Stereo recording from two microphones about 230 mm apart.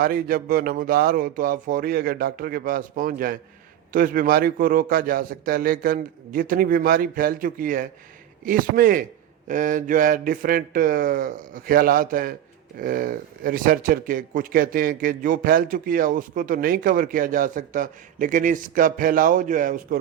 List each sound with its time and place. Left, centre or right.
0.0 s speech: right